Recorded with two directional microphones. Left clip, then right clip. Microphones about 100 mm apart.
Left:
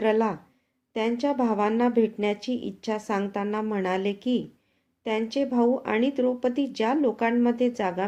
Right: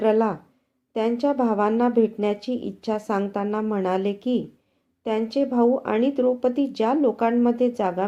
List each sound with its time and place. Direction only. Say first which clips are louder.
0.0 s a woman's voice: right 3 dB; 25° right (ahead or behind)